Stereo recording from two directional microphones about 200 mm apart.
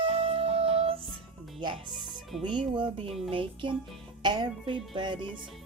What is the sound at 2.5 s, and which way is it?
Speech, 25° right (ahead or behind).